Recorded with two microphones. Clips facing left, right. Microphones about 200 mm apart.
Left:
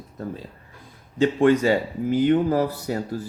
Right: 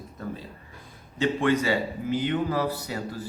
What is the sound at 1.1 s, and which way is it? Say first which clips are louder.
Speech: left 6 dB; 45° left (ahead or behind).